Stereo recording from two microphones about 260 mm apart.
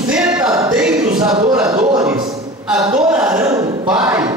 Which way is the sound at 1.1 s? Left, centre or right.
Centre.